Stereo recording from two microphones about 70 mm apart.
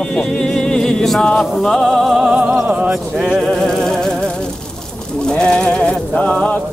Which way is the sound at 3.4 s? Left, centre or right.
Centre.